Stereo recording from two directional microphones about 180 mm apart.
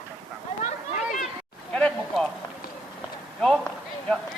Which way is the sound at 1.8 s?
5° left (ahead or behind).